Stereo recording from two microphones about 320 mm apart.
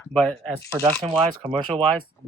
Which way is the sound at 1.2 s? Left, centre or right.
Centre.